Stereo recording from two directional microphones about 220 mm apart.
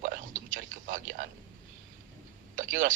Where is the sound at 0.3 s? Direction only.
35° right (ahead or behind).